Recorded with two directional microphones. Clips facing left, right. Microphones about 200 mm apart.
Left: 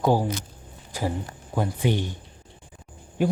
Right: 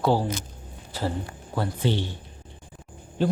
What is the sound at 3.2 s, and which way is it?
Speech, 10° left (ahead or behind).